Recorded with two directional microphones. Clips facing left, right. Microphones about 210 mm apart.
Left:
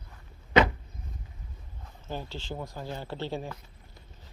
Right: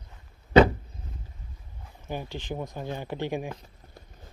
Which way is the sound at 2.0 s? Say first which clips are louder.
Right 3 dB; 15° right (ahead or behind).